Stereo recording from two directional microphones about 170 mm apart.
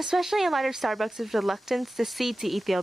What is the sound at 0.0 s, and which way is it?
Speech, centre (ahead or behind).